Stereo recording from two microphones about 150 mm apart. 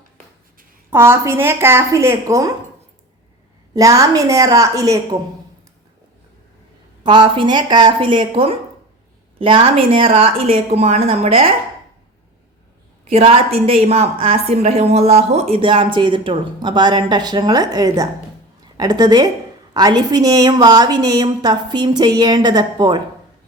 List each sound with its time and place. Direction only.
0.9 s speech: 15° right (ahead or behind)
3.8 s a woman's voice: 20° right (ahead or behind)
7.0 s a woman's voice: 30° right (ahead or behind)
13.1 s a woman's voice: 40° right (ahead or behind)